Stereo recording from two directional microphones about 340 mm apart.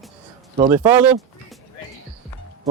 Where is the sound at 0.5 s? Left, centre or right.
Centre.